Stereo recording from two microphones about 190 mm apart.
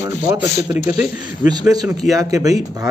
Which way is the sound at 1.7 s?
20° right (ahead or behind).